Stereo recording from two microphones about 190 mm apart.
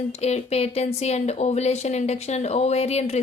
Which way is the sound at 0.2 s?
35° left (ahead or behind).